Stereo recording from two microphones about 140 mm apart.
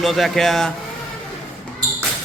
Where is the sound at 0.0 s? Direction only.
Centre (ahead or behind).